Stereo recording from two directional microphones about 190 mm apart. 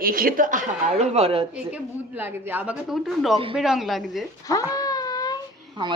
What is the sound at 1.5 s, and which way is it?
A woman's voice, 10° right (ahead or behind).